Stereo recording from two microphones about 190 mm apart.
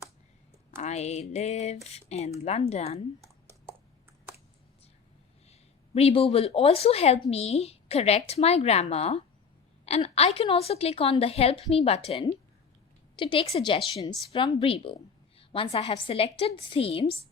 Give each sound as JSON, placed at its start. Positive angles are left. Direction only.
{"t": 0.8, "sound": "speech", "side_deg": 35}
{"t": 5.5, "sound": "a woman's voice", "side_deg": 30}